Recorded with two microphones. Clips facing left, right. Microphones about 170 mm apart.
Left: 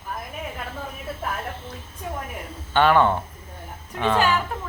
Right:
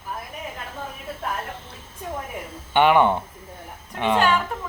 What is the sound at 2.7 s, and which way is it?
Speech, 15° right (ahead or behind).